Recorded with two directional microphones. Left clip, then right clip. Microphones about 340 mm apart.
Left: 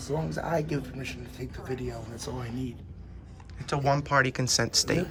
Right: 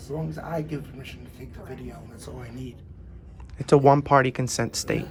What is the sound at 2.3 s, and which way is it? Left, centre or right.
Speech, left.